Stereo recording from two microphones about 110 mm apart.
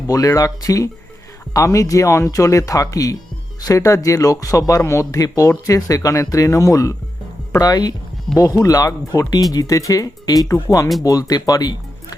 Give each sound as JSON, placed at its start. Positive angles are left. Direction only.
{"t": 0.1, "sound": "speech", "side_deg": 35}